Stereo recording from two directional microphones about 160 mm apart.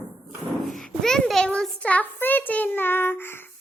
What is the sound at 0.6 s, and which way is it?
A child's voice, centre (ahead or behind).